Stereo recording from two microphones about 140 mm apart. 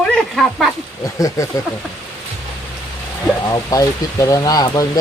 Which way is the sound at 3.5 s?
25° left (ahead or behind).